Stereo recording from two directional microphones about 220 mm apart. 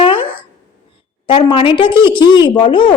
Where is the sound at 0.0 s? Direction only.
25° left (ahead or behind).